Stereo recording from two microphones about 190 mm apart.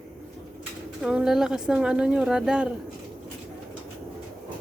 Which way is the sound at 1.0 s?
5° right (ahead or behind).